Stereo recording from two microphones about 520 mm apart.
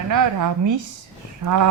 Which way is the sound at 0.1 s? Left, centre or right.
Right.